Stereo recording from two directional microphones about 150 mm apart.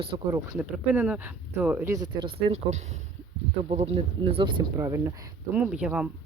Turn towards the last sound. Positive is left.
turn(degrees=-5)  # may be behind; listen again after turning